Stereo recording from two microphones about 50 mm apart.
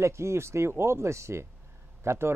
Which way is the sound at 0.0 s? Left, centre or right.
Right.